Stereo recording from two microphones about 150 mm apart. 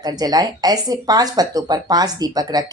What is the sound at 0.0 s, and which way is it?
Speech, 25° right (ahead or behind).